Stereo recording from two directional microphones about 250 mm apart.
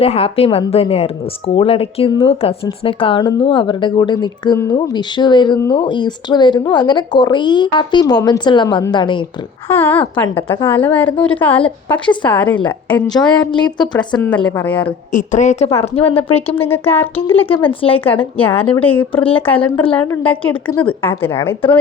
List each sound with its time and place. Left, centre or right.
0.0 s a woman's voice: left
9.6 s speech: centre
11.9 s a woman's voice: centre
12.3 s speech: centre
13.7 s speech: centre
14.4 s speech: centre
15.1 s a woman's voice: left
16.6 s speech: centre
17.5 s a woman's voice: left
18.0 s speech: centre
19.1 s a woman's voice: left
20.0 s speech: centre